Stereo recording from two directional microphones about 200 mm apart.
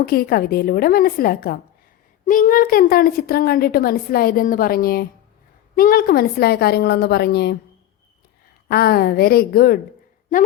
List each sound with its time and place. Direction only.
0.0 s a woman's voice: 50° left (ahead or behind)
8.7 s a woman's voice: 50° left (ahead or behind)